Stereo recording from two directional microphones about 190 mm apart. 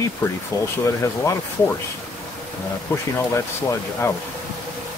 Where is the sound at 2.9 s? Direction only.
10° left (ahead or behind).